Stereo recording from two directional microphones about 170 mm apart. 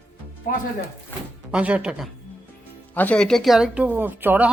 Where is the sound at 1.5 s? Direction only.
5° right (ahead or behind).